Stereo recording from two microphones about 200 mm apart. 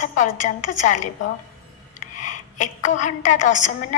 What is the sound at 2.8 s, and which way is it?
A woman's voice, 40° left (ahead or behind).